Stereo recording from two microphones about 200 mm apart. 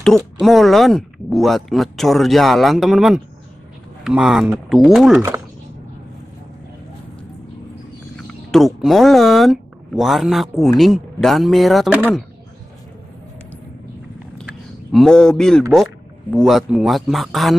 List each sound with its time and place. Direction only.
0.0 s speech: centre (ahead or behind)
8.2 s speech: 5° left (ahead or behind)
14.4 s a sound: centre (ahead or behind)
15.7 s speech: centre (ahead or behind)